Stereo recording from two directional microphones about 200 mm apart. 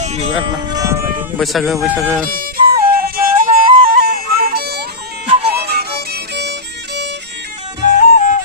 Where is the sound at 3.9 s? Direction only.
50° right (ahead or behind).